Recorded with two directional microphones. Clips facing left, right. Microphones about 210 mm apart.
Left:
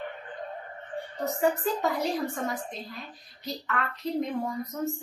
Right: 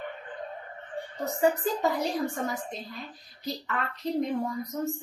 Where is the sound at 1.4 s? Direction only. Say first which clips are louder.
Right 2 dB; centre (ahead or behind).